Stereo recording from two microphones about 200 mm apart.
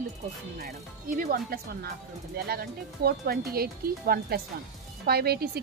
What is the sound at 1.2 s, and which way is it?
Speech, 45° right (ahead or behind).